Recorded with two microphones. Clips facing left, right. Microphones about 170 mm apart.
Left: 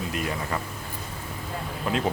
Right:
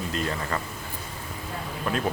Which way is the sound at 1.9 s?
20° left (ahead or behind).